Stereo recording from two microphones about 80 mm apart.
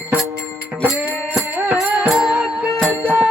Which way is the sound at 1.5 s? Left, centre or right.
Centre.